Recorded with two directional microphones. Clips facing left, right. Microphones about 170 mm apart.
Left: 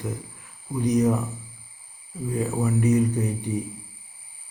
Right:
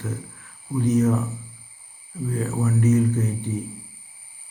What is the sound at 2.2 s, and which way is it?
Mantra, 15° left (ahead or behind).